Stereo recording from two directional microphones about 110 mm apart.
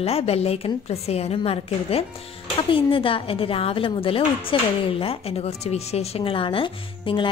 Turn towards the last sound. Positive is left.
turn(degrees=50)  # may be behind; listen again after turning